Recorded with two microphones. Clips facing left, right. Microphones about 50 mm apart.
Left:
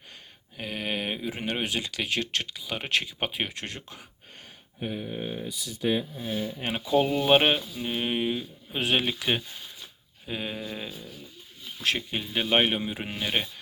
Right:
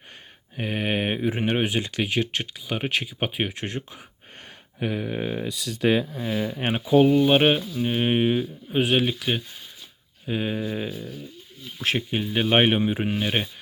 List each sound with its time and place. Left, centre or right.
0.5 s speech: right
4.8 s speech: right
6.7 s speech: centre
7.2 s speech: centre
7.9 s speech: right
8.7 s speech: centre
10.2 s speech: centre
11.9 s speech: centre
12.5 s speech: right
12.8 s speech: centre